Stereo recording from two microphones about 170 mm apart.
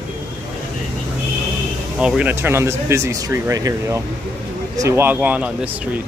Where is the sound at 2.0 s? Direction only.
5° right (ahead or behind).